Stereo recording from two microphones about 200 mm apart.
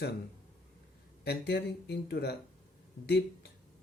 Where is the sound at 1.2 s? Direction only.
55° left (ahead or behind).